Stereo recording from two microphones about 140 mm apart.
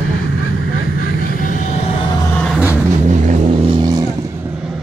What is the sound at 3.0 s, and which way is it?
Music, 60° right (ahead or behind).